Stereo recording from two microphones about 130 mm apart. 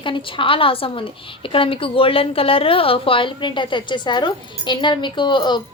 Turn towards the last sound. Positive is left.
turn(degrees=35)  # may be behind; listen again after turning